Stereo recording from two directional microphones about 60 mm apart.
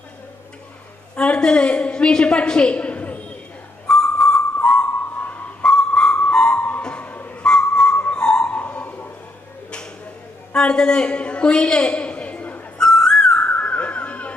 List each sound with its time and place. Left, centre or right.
1.1 s a woman's voice: centre
3.8 s whistle: centre
5.2 s sonar: left
5.6 s a sound: centre
7.4 s whistle: centre
8.1 s a sound: centre
8.4 s bird: left
10.5 s a sound: centre
12.8 s whistling: centre